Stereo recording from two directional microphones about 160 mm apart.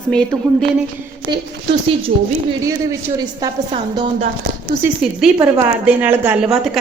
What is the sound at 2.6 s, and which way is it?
Speech, 20° right (ahead or behind).